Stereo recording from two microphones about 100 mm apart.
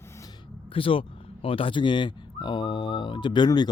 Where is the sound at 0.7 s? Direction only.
65° left (ahead or behind).